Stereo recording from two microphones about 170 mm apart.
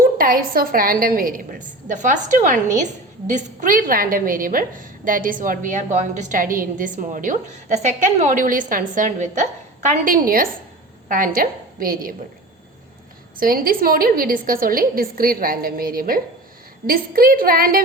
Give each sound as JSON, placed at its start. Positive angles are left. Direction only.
{"t": 0.2, "sound": "a woman's voice", "side_deg": -60}
{"t": 13.4, "sound": "a woman's voice", "side_deg": -60}